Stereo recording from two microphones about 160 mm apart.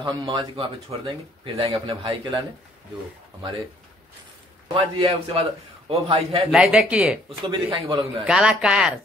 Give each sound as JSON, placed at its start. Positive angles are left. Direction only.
{"t": 0.0, "sound": "speech", "side_deg": -30}
{"t": 4.7, "sound": "speech", "side_deg": -35}
{"t": 6.5, "sound": "speech", "side_deg": -5}
{"t": 7.2, "sound": "speech", "side_deg": -30}
{"t": 8.3, "sound": "speech", "side_deg": -5}